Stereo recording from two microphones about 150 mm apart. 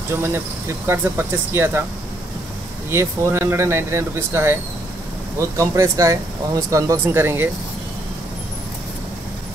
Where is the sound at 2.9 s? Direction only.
15° right (ahead or behind).